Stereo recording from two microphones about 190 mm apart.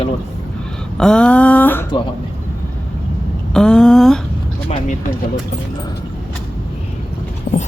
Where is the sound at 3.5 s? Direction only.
5° left (ahead or behind).